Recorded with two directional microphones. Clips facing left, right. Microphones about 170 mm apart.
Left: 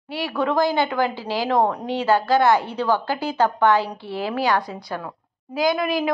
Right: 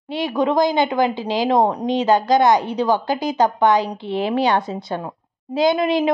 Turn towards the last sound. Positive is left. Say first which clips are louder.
# right 4 dB
turn(degrees=-25)  # may be behind; listen again after turning